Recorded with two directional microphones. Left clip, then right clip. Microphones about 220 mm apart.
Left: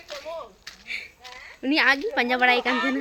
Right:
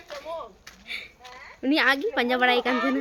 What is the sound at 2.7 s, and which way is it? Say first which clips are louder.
Speech: even; 40° right (ahead or behind).